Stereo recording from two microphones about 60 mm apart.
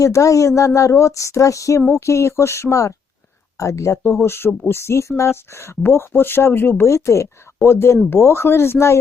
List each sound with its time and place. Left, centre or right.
0.0 s a sound: left
1.9 s speech: left
6.8 s speech: left